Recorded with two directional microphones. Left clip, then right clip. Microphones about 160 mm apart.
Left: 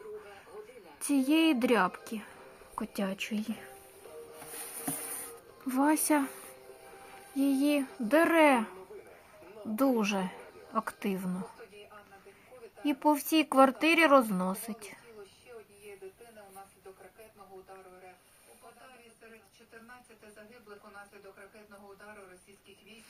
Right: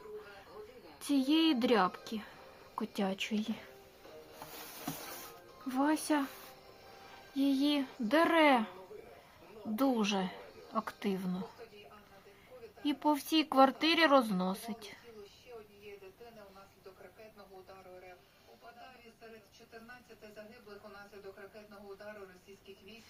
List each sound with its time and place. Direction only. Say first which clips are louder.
1.0 s speech: left 3 dB; 10° left (ahead or behind)
5.6 s speech: left 4 dB; 15° left (ahead or behind)
7.3 s speech: left 3 dB; centre (ahead or behind)
9.7 s speech: left 3 dB; 10° left (ahead or behind)
12.9 s speech: left 4 dB; 10° left (ahead or behind)